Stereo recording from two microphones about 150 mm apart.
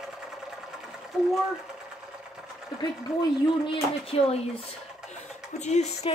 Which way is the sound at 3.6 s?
40° left (ahead or behind).